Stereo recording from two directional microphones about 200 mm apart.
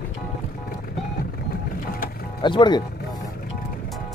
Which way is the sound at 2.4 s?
20° left (ahead or behind).